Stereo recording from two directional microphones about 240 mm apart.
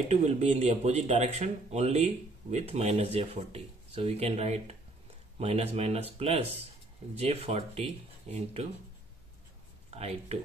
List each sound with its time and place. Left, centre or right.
0.1 s speech: right
9.9 s speech: right